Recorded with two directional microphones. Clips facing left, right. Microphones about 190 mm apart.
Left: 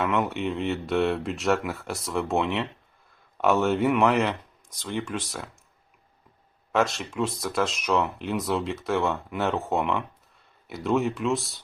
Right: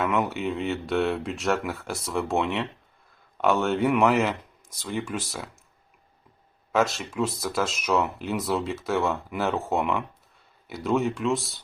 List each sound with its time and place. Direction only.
0.0 s speech: centre (ahead or behind)
6.7 s speech: centre (ahead or behind)